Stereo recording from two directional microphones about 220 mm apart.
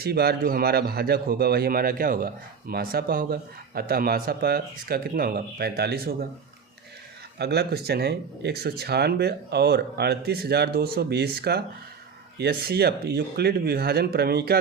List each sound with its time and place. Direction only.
0.0 s speech: 45° right (ahead or behind)
7.3 s speech: 50° right (ahead or behind)